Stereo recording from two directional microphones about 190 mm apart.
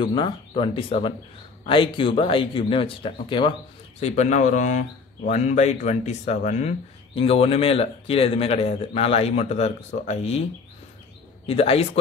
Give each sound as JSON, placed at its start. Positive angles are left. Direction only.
{"t": 0.0, "sound": "speech", "side_deg": 25}
{"t": 4.0, "sound": "a man's voice", "side_deg": 40}
{"t": 11.4, "sound": "a man's voice", "side_deg": 30}